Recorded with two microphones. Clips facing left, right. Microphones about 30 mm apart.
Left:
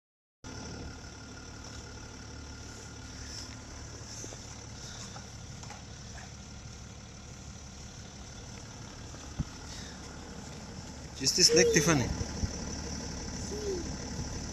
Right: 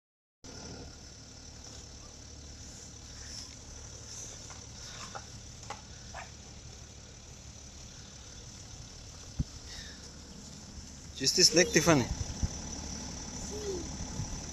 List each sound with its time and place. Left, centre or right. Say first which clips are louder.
11.1 s speech: left 1 dB; centre
12.1 s vehicle: left 3 dB; left
12.9 s vehicle: left 3 dB; left